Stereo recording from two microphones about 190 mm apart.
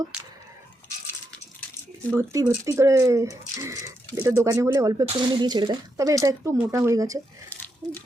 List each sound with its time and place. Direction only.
0.1 s speech: 5° right (ahead or behind)
2.0 s speech: 15° right (ahead or behind)
7.5 s a sound: 10° left (ahead or behind)